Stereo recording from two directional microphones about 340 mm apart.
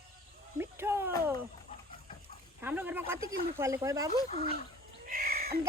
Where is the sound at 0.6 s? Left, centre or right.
Centre.